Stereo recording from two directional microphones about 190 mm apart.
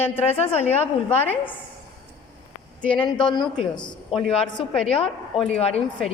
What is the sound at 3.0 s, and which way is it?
A man's voice, 25° left (ahead or behind).